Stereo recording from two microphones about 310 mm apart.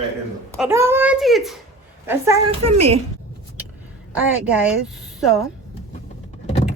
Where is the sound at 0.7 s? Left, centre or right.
Centre.